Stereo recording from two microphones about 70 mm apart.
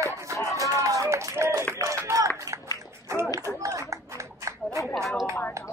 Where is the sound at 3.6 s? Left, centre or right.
Right.